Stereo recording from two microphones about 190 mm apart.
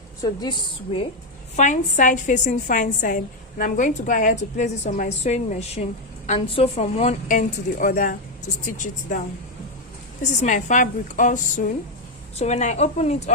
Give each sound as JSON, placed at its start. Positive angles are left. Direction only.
{"t": 0.2, "sound": "a woman's voice", "side_deg": 20}
{"t": 1.5, "sound": "a woman's voice", "side_deg": 40}
{"t": 10.4, "sound": "a woman's voice", "side_deg": 40}